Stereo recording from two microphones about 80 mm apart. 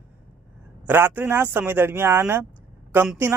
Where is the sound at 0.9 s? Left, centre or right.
Right.